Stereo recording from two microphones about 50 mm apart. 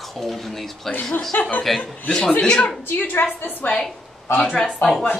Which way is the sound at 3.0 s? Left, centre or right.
Left.